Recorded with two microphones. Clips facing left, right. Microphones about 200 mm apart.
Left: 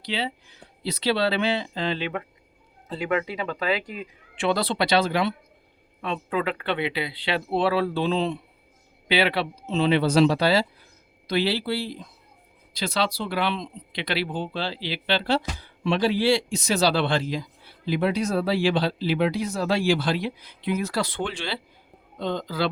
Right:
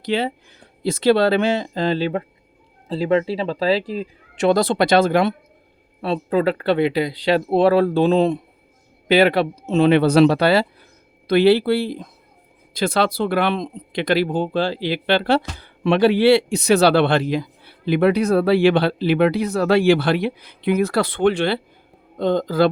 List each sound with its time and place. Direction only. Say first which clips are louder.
0.0 s speech: right 8 dB; 50° right (ahead or behind)
6.0 s speech: right 8 dB; 35° right (ahead or behind)